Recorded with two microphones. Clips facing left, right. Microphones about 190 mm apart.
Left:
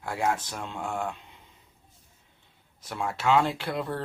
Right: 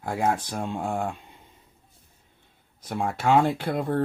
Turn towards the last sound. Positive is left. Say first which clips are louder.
# right 6 dB
turn(degrees=-50)  # may be behind; listen again after turning